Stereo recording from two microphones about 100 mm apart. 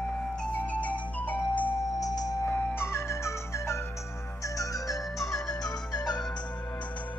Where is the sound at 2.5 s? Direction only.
20° left (ahead or behind).